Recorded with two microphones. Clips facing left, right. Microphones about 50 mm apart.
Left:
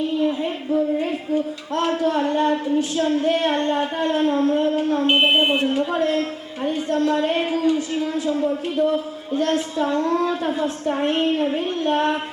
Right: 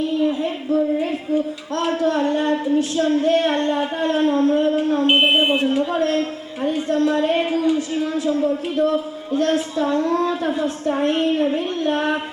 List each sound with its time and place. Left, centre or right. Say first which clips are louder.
0.2 s speech: right 1 dB; centre
4.6 s smoke detector: right 2 dB; centre
5.0 s speech: right 1 dB; centre
5.3 s speech: right 1 dB; centre